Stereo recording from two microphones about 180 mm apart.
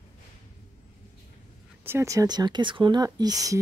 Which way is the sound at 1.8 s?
15° right (ahead or behind).